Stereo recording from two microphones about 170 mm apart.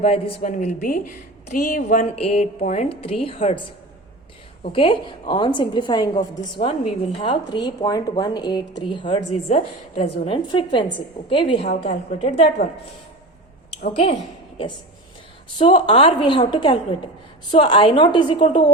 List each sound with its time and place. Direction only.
0.0 s speech: 35° left (ahead or behind)
0.5 s speech: 45° left (ahead or behind)
4.6 s speech: 30° left (ahead or behind)
9.5 s speech: 40° left (ahead or behind)
13.9 s speech: 40° left (ahead or behind)
15.5 s speech: 35° left (ahead or behind)